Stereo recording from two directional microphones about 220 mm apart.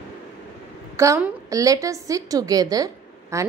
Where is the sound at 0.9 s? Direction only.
10° right (ahead or behind).